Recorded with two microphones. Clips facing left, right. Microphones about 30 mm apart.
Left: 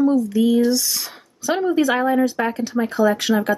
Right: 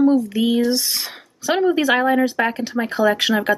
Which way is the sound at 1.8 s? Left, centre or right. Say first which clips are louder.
Right 1 dB; right.